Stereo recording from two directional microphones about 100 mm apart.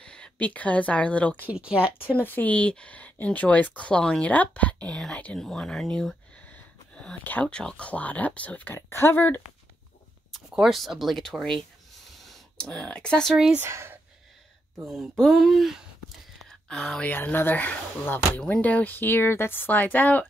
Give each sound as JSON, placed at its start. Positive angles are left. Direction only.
{"t": 0.0, "sound": "speech", "side_deg": 10}
{"t": 1.5, "sound": "speech", "side_deg": -10}
{"t": 2.1, "sound": "speech", "side_deg": 15}
{"t": 10.3, "sound": "speech", "side_deg": 0}
{"t": 13.6, "sound": "speech", "side_deg": -25}
{"t": 15.1, "sound": "speech", "side_deg": 0}
{"t": 16.4, "sound": "a sound", "side_deg": 5}
{"t": 17.1, "sound": "speech", "side_deg": 20}